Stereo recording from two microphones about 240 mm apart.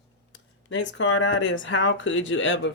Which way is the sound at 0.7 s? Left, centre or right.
Left.